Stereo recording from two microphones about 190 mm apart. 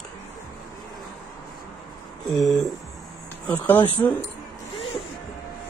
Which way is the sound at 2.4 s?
Centre (ahead or behind).